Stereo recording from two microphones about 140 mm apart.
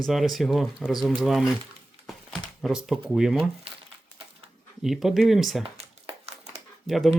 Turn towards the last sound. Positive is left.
turn(degrees=0)  # may be behind; listen again after turning